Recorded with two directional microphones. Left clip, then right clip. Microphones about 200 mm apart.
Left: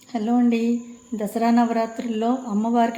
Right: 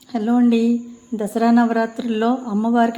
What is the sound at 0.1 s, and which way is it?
Speech, 15° right (ahead or behind).